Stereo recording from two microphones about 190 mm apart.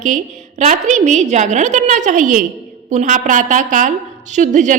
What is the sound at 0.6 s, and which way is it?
A woman's voice, 40° right (ahead or behind).